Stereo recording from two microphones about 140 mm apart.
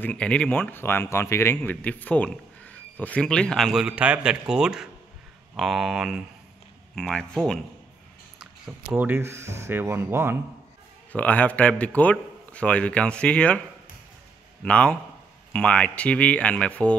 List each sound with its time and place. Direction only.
0.0 s speech: 10° left (ahead or behind)
8.8 s speech: 15° right (ahead or behind)
11.1 s speech: 10° left (ahead or behind)
14.6 s speech: 10° left (ahead or behind)